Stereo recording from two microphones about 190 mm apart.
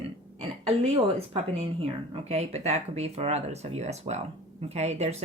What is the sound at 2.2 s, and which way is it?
A woman's voice, 35° right (ahead or behind).